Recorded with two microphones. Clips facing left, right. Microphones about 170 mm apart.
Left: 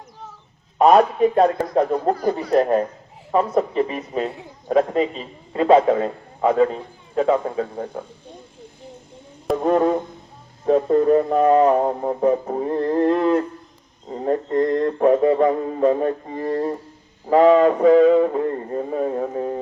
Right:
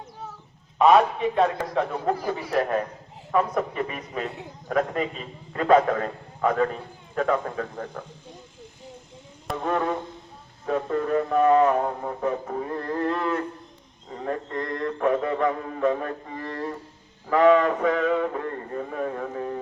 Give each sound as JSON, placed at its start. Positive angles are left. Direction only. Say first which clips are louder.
{"t": 0.8, "sound": "music", "louder": "left 4 dB", "side_deg": 40}
{"t": 3.3, "sound": "a man's voice", "louder": "left 5 dB", "side_deg": 30}
{"t": 9.6, "sound": "music", "louder": "left 7 dB", "side_deg": 35}
{"t": 17.2, "sound": "a man's voice", "louder": "left 5 dB", "side_deg": 30}